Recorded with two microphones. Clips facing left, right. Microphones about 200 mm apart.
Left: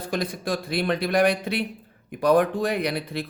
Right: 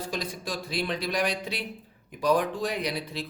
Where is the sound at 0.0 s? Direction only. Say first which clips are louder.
Left 5 dB; 55° left (ahead or behind).